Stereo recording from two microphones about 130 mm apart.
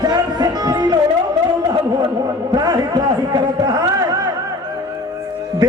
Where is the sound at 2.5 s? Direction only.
30° right (ahead or behind).